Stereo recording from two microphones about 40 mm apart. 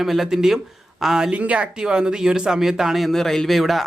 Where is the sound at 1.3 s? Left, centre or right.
Right.